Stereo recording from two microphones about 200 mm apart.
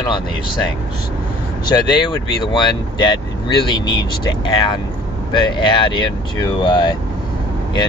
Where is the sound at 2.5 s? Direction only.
25° left (ahead or behind).